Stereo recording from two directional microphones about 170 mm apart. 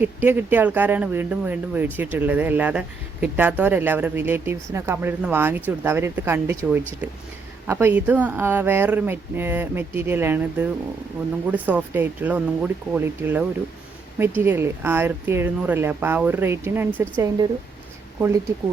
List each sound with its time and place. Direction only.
0.0 s speech: 10° right (ahead or behind)